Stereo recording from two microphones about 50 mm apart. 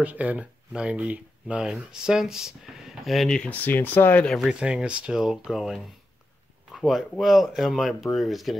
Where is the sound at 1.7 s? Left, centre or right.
Centre.